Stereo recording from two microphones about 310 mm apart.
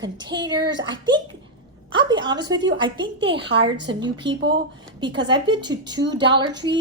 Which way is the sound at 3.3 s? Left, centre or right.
Right.